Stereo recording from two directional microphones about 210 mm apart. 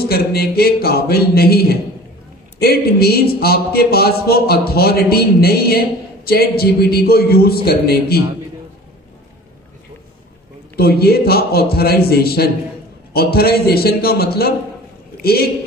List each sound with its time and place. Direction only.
0.0 s speech: 45° left (ahead or behind)
10.8 s speech: 50° left (ahead or behind)